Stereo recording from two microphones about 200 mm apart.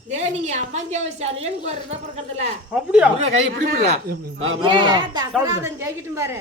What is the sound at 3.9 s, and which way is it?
Speech, 50° right (ahead or behind).